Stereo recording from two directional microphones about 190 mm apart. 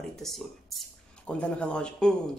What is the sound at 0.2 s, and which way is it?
Speech, centre (ahead or behind).